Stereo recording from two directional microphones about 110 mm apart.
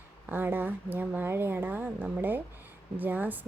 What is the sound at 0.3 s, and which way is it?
Speech, 20° right (ahead or behind).